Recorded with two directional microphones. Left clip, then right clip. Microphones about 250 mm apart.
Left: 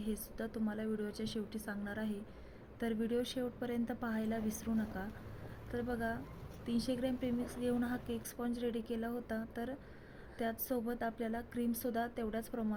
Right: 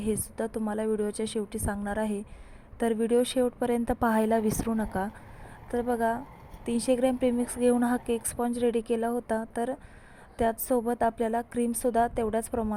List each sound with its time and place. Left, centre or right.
0.0 s a woman's voice: right
5.7 s a woman's voice: right